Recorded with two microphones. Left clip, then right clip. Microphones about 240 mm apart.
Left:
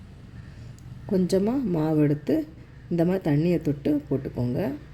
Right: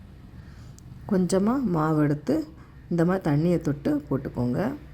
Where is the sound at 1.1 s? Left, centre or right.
Centre.